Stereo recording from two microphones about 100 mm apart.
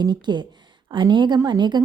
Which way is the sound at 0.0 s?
50° right (ahead or behind).